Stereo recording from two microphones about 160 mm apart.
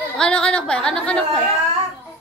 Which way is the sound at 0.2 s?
5° left (ahead or behind).